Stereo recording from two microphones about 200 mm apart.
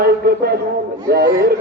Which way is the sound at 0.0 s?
50° right (ahead or behind).